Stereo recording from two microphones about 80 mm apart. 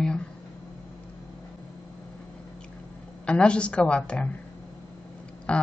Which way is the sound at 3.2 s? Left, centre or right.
Centre.